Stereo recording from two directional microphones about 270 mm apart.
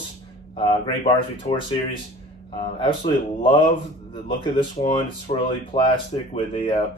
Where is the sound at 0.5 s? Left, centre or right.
Left.